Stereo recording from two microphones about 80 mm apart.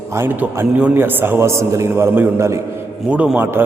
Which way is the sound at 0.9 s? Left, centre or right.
Right.